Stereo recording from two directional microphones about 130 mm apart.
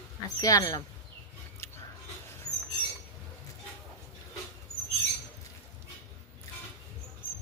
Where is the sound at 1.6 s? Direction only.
20° left (ahead or behind).